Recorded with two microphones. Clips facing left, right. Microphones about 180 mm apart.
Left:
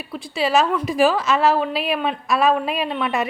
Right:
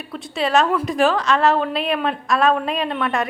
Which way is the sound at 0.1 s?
Centre (ahead or behind).